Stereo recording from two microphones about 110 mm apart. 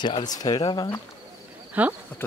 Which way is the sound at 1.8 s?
15° right (ahead or behind).